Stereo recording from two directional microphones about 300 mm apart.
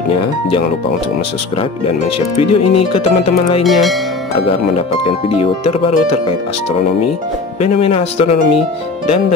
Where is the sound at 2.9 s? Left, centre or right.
Centre.